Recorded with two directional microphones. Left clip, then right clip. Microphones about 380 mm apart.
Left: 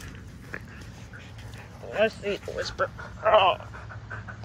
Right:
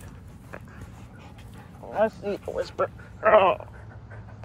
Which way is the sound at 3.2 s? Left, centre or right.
Centre.